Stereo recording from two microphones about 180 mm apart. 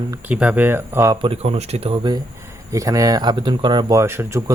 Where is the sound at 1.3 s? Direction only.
35° right (ahead or behind); by 4.4 s 15° right (ahead or behind).